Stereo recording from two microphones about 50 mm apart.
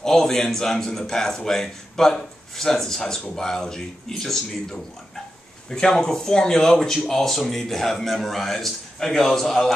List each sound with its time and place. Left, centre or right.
0.0 s a man's voice: centre